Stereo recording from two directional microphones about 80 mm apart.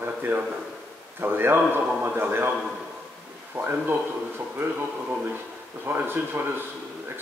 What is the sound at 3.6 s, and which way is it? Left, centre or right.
Speech, centre.